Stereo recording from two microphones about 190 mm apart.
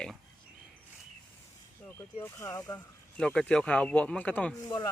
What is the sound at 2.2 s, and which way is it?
Speech, 15° left (ahead or behind).